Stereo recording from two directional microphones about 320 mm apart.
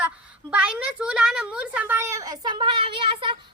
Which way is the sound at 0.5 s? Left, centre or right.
Centre.